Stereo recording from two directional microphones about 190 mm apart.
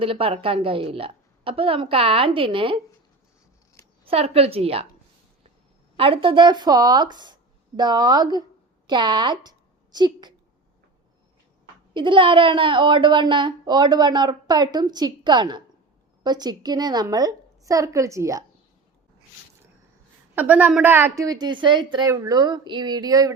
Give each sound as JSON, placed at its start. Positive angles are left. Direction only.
{"t": 0.0, "sound": "a woman's voice", "side_deg": -30}
{"t": 4.0, "sound": "a woman's voice", "side_deg": -30}
{"t": 6.0, "sound": "a woman's voice", "side_deg": -30}
{"t": 11.9, "sound": "a woman's voice", "side_deg": -25}
{"t": 20.3, "sound": "a woman's voice", "side_deg": -10}